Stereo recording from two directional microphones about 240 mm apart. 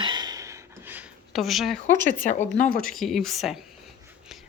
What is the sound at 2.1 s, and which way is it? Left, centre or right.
Speech, left.